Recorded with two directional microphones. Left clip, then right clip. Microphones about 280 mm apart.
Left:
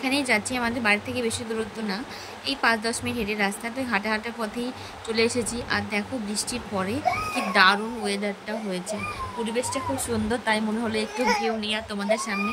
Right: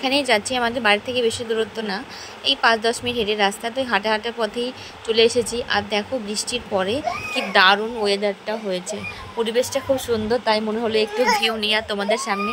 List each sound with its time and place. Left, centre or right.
0.0 s a woman's voice: centre
2.4 s a woman's voice: centre
10.0 s a woman's voice: centre
11.2 s a woman's voice: centre